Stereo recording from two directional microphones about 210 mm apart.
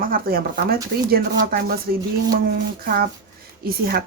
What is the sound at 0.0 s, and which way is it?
Speech, 45° right (ahead or behind).